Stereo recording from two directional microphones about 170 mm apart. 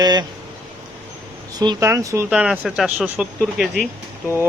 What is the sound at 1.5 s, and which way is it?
Speech, 25° right (ahead or behind).